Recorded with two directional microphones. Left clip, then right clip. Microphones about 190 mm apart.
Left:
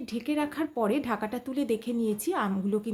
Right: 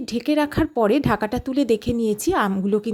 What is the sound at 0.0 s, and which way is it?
Speech, 40° right (ahead or behind).